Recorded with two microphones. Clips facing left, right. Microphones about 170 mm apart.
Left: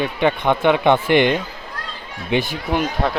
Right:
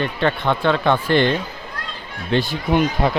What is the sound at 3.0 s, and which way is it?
Speech, centre (ahead or behind).